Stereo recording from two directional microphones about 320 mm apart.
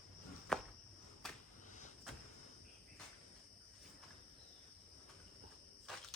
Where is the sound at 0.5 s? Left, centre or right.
Centre.